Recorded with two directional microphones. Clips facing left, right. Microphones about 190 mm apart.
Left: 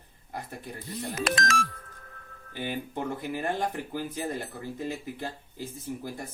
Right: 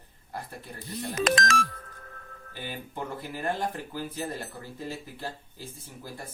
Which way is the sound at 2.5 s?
20° left (ahead or behind).